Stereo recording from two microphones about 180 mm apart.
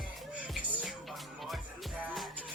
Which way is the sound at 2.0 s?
Centre (ahead or behind).